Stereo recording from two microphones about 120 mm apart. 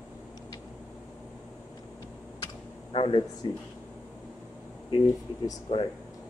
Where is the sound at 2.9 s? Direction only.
50° left (ahead or behind).